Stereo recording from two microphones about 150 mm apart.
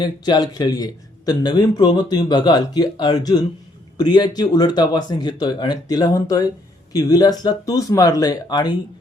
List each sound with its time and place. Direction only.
0.0 s speech: 25° left (ahead or behind)